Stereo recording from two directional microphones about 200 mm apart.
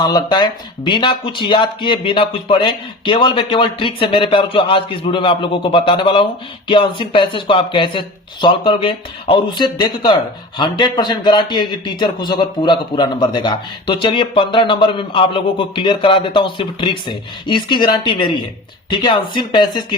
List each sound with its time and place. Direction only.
0.0 s a man's voice: 20° left (ahead or behind)